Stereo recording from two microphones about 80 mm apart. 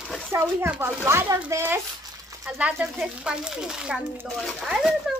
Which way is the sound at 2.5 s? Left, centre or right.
Centre.